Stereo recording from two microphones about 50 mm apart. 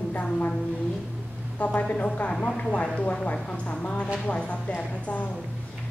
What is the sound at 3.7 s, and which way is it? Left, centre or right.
A woman's voice, left.